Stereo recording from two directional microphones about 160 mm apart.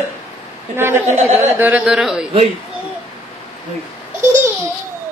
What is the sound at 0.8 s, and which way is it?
Speech, 15° right (ahead or behind).